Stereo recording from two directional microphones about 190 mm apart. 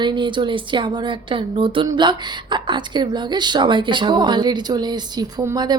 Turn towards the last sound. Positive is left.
turn(degrees=-20)  # may be behind; listen again after turning